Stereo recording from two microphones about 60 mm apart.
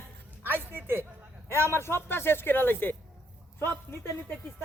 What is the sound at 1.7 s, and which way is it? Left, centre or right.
Speech, left.